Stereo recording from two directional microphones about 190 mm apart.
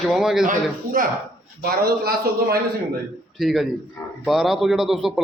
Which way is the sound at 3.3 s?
Centre (ahead or behind).